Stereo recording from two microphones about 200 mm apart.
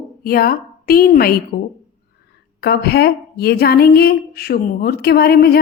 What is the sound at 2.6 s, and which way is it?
A woman's voice, 50° left (ahead or behind).